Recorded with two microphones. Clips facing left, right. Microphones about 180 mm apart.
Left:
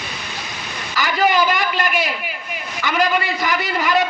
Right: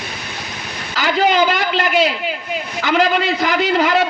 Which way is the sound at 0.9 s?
65° right (ahead or behind).